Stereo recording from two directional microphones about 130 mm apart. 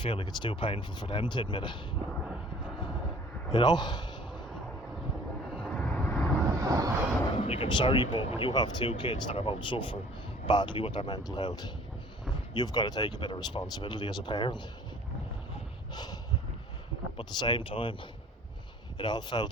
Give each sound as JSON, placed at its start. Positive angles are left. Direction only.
{"t": 0.0, "sound": "speech", "side_deg": 40}
{"t": 3.5, "sound": "speech", "side_deg": 35}
{"t": 5.5, "sound": "vehicle", "side_deg": 10}
{"t": 6.6, "sound": "vehicle", "side_deg": -25}
{"t": 7.3, "sound": "speech", "side_deg": 45}
{"t": 17.2, "sound": "speech", "side_deg": 35}
{"t": 18.9, "sound": "speech", "side_deg": 35}